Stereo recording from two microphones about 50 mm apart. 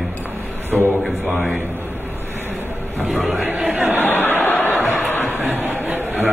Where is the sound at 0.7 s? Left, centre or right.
Right.